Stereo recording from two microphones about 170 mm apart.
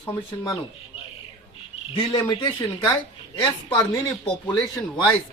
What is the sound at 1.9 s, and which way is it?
Speech, 25° left (ahead or behind).